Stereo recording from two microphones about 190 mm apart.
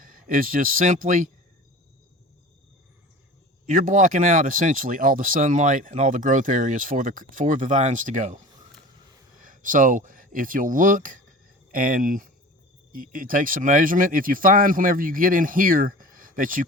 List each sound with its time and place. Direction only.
0.0 s speech: 50° right (ahead or behind)
3.7 s speech: 45° right (ahead or behind)
9.4 s speech: 45° right (ahead or behind)